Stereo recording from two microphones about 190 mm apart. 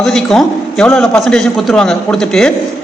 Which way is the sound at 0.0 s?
5° left (ahead or behind).